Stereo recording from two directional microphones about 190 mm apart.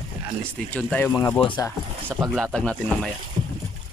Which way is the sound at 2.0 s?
10° right (ahead or behind).